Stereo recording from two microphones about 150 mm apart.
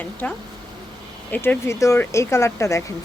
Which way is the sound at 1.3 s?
15° left (ahead or behind).